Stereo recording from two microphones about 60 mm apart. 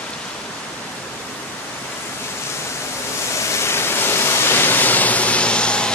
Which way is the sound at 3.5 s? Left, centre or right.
Left.